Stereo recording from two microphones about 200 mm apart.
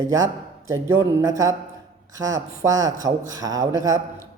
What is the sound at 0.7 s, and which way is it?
Speech, 15° right (ahead or behind).